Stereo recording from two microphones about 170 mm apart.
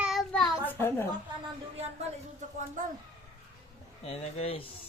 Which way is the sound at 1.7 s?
40° right (ahead or behind).